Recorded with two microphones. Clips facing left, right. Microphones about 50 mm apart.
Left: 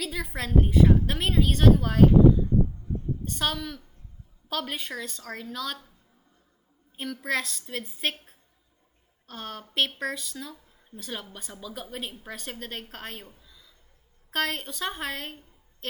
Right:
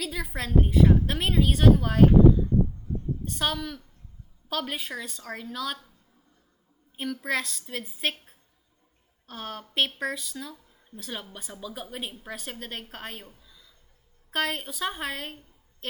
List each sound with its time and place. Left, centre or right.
0.0 s a woman's voice: centre
3.2 s a woman's voice: centre
6.9 s a woman's voice: centre
9.2 s a woman's voice: centre
13.4 s a sound: centre
14.3 s a woman's voice: centre
15.8 s a sound: centre